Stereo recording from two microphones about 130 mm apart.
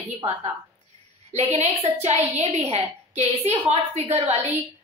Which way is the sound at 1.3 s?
55° right (ahead or behind).